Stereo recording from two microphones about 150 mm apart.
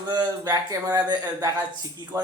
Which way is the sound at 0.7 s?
25° right (ahead or behind).